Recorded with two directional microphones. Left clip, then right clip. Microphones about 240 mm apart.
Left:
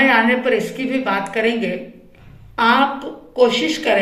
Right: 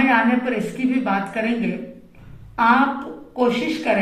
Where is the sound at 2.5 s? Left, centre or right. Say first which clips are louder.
Left 1 dB; left.